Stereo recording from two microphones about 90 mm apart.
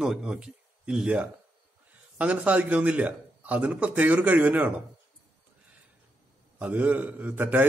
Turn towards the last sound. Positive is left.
turn(degrees=-20)  # may be behind; listen again after turning